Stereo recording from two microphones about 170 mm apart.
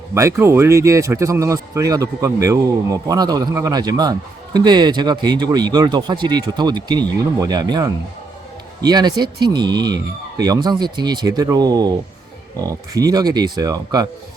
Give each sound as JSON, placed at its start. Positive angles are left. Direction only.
{"t": 0.1, "sound": "speech", "side_deg": -15}